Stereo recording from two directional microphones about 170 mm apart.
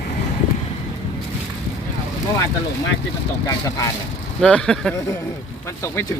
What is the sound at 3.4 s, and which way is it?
Speech, 20° left (ahead or behind).